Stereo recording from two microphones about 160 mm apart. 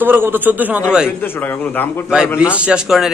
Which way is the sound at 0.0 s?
10° right (ahead or behind).